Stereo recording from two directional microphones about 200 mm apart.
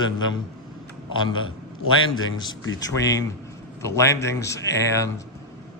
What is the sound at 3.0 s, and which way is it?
Speech, 15° left (ahead or behind).